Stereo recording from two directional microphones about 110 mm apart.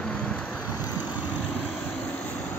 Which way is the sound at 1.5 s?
15° left (ahead or behind).